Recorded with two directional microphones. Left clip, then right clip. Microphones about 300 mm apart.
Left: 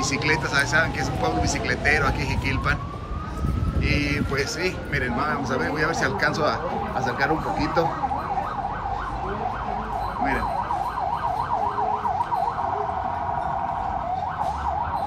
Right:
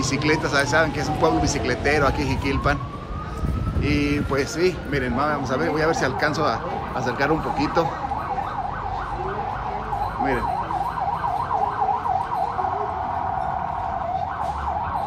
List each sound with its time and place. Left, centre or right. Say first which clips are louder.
0.1 s speech: right 3 dB; centre
3.9 s speech: right 2 dB; centre